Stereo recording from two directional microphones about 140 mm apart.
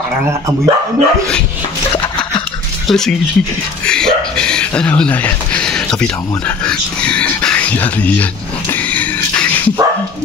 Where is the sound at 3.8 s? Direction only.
5° left (ahead or behind).